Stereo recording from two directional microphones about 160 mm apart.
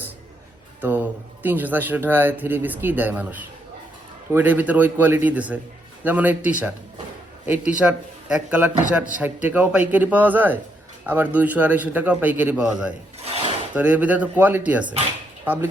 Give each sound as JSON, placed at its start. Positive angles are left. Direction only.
{"t": 0.8, "sound": "a man's voice", "side_deg": -10}
{"t": 13.2, "sound": "filing", "side_deg": -40}
{"t": 13.7, "sound": "a man's voice", "side_deg": -10}